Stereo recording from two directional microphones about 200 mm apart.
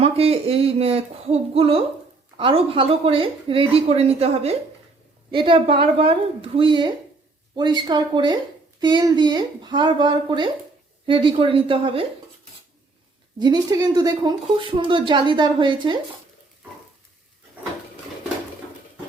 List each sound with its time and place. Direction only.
0.0 s a woman's voice: 30° right (ahead or behind)
13.4 s a woman's voice: 20° right (ahead or behind)